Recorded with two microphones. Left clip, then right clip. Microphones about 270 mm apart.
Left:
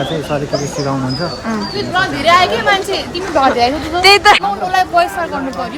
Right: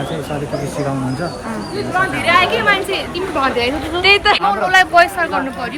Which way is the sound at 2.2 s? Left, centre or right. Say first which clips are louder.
Left 3 dB; left.